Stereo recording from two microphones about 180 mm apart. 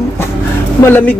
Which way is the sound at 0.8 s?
10° left (ahead or behind).